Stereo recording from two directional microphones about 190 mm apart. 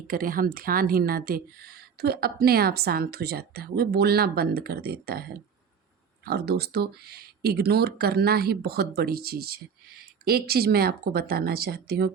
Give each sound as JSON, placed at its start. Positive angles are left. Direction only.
{"t": 0.1, "sound": "a woman's voice", "side_deg": -50}
{"t": 6.2, "sound": "a woman's voice", "side_deg": -55}